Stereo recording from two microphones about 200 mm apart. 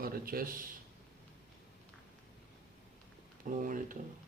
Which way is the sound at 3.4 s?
40° right (ahead or behind).